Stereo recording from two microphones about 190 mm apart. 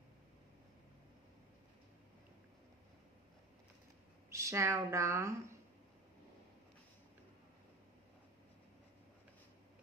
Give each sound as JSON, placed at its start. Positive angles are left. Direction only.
{"t": 4.3, "sound": "speech", "side_deg": -15}